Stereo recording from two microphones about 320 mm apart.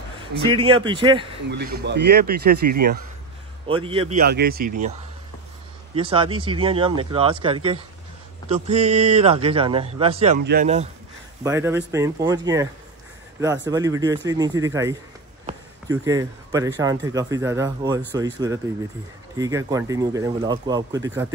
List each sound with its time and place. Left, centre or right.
0.7 s speech: centre
1.5 s speech: right
3.6 s speech: centre
5.9 s speech: centre
11.4 s speech: centre